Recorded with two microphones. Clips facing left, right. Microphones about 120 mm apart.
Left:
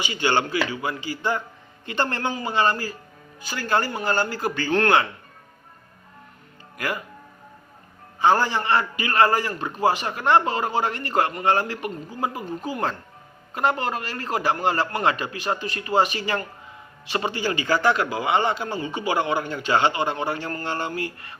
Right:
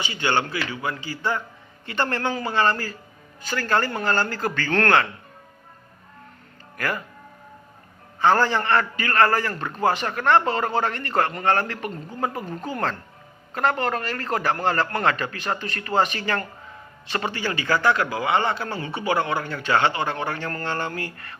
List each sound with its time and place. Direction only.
0.1 s speech: 30° left (ahead or behind)
0.8 s a man's voice: 15° left (ahead or behind)
6.7 s speech: 15° left (ahead or behind)
8.2 s a man's voice: 15° left (ahead or behind)